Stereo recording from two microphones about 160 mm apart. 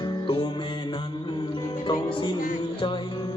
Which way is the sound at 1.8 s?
30° left (ahead or behind).